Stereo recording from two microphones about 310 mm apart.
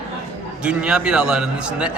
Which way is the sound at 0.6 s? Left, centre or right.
Centre.